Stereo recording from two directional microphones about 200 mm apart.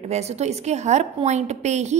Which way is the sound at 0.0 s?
35° right (ahead or behind).